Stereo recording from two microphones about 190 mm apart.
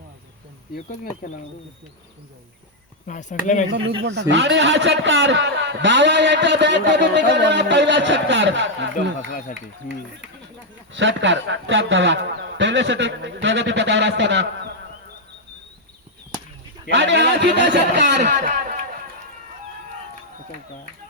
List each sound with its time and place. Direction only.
1.2 s speech: 45° left (ahead or behind)
3.1 s speech: 40° left (ahead or behind)
4.0 s a man's voice: 70° right (ahead or behind)
10.9 s a man's voice: 75° right (ahead or behind)
16.9 s a man's voice: 65° right (ahead or behind)
18.3 s a sound: 45° right (ahead or behind)